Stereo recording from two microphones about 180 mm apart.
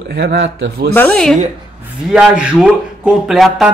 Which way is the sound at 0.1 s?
70° right (ahead or behind).